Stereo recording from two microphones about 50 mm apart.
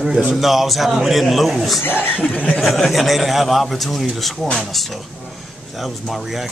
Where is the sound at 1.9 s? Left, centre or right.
Left.